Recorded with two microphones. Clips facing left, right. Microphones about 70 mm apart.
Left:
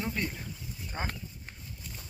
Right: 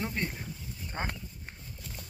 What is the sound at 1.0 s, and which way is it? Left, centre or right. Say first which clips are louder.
Speech: right 1 dB; right.